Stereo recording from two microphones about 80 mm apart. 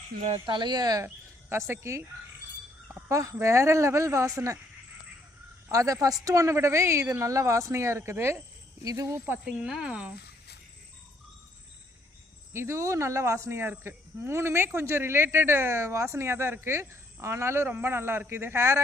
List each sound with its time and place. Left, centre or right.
0.4 s speech: right
1.0 s speech: right
3.1 s speech: right
5.7 s a woman's voice: right
8.8 s a woman's voice: right
9.4 s cricket: centre
12.5 s speech: right